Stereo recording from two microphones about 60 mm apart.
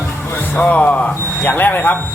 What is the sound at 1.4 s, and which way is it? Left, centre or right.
Speech, left.